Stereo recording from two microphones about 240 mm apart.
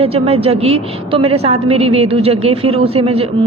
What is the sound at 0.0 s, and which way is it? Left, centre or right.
A woman's voice, right.